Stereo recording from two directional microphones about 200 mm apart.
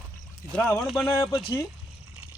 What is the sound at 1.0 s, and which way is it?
Speech, 25° left (ahead or behind).